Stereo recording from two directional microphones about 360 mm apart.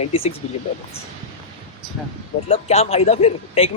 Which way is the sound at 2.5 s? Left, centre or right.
Centre.